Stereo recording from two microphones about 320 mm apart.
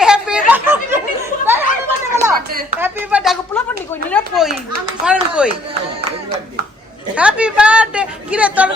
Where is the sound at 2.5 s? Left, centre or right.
Right.